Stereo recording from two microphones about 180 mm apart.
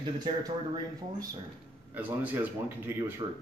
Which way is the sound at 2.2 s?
10° right (ahead or behind).